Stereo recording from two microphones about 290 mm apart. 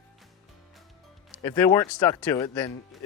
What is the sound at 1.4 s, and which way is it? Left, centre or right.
Speech, centre.